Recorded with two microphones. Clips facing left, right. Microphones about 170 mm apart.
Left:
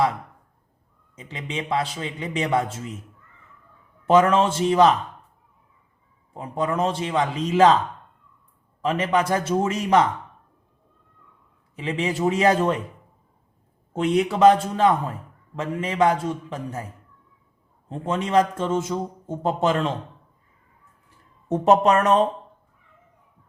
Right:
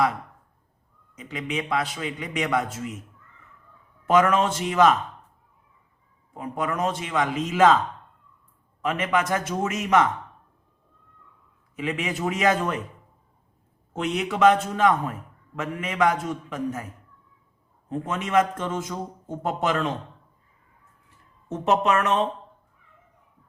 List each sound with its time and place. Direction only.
1.1 s a man's voice: 25° left (ahead or behind)
4.0 s a man's voice: 30° left (ahead or behind)
6.3 s a man's voice: 30° left (ahead or behind)
8.8 s a man's voice: 30° left (ahead or behind)
11.8 s a man's voice: 30° left (ahead or behind)
13.9 s a man's voice: 30° left (ahead or behind)
21.5 s a man's voice: 35° left (ahead or behind)